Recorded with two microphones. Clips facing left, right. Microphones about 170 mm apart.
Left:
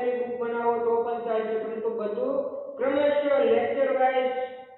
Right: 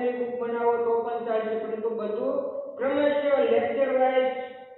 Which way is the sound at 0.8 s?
Centre (ahead or behind).